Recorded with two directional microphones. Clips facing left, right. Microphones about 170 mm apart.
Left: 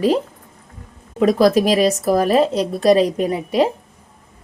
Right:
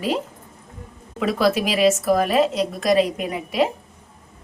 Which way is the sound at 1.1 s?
40° left (ahead or behind).